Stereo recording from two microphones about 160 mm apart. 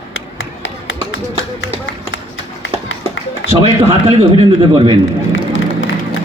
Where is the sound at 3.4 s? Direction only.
40° right (ahead or behind).